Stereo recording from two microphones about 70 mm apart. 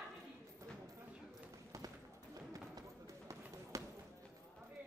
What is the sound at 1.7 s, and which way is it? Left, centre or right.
Clip-clop, right.